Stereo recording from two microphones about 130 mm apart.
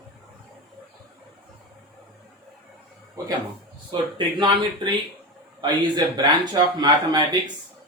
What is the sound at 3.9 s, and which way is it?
Speech, 40° right (ahead or behind).